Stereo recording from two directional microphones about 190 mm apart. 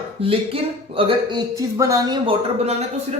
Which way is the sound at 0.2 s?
30° right (ahead or behind).